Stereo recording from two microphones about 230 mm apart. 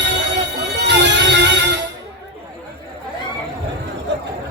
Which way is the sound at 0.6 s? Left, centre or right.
Right.